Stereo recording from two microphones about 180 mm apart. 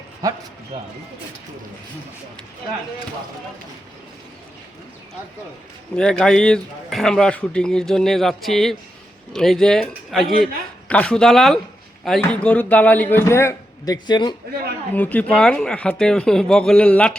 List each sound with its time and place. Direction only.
0.2 s speech: 20° right (ahead or behind)
0.7 s speech: 30° right (ahead or behind)
6.0 s a man's voice: 5° left (ahead or behind); by 14.3 s 25° left (ahead or behind)
14.9 s speech: 10° left (ahead or behind)